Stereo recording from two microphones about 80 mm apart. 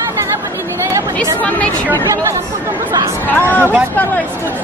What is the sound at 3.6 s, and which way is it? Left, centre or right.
Speech, right.